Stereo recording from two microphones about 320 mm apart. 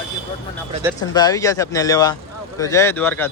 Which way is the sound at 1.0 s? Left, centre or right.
Centre.